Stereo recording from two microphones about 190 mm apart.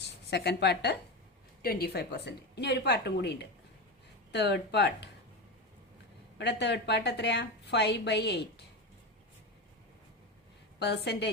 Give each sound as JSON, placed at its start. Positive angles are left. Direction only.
{"t": 0.0, "sound": "a woman's voice", "side_deg": 60}
{"t": 6.4, "sound": "a woman's voice", "side_deg": 65}
{"t": 10.8, "sound": "a woman's voice", "side_deg": 60}